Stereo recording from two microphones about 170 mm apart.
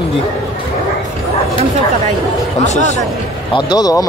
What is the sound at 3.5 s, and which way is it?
Speech, 25° left (ahead or behind).